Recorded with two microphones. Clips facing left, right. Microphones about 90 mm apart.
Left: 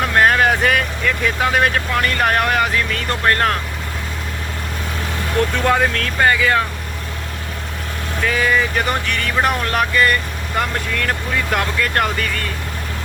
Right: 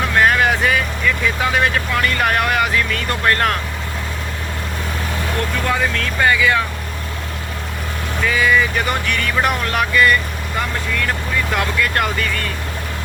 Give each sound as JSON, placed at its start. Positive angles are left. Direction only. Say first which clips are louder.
{"t": 0.2, "sound": "vehicle", "louder": "left 1 dB", "side_deg": 40}
{"t": 0.7, "sound": "vehicle", "louder": "even", "side_deg": 60}
{"t": 1.5, "sound": "speech", "louder": "left 1 dB", "side_deg": 45}
{"t": 5.6, "sound": "speech", "louder": "left 2 dB", "side_deg": 55}
{"t": 6.1, "sound": "speech", "louder": "even", "side_deg": 40}
{"t": 8.3, "sound": "speech", "louder": "right 2 dB", "side_deg": 40}
{"t": 11.5, "sound": "speech", "louder": "left 1 dB", "side_deg": 40}